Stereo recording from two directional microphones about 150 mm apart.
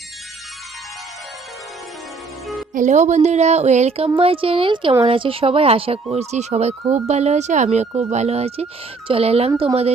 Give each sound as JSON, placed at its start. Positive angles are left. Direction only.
{"t": 2.7, "sound": "speech", "side_deg": -55}